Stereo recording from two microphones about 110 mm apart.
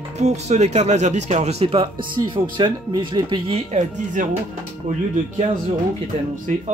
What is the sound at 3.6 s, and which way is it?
Speech, 90° right.